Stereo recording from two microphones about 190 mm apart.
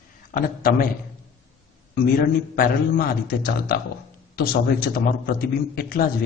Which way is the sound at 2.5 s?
50° left (ahead or behind).